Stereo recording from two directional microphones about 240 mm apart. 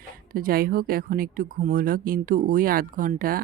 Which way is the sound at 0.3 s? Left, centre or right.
Right.